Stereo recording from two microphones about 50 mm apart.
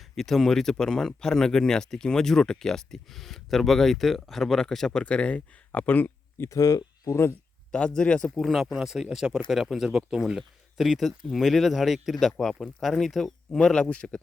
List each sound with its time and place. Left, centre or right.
0.2 s speech: centre
4.9 s speech: centre; by 6.4 s left
7.1 s speech: left
7.7 s speech: centre
8.4 s speech: centre
13.8 s speech: left